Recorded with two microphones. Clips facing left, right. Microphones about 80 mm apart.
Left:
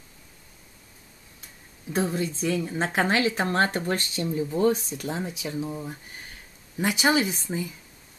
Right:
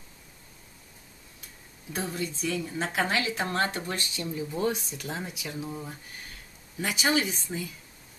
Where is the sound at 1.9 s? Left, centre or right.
Left.